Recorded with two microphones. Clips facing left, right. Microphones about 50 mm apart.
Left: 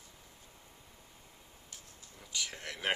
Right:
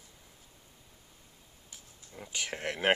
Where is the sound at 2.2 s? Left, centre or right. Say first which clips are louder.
Right 5 dB; right.